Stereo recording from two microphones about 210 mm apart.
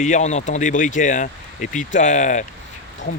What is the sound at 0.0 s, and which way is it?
Speech, 35° left (ahead or behind).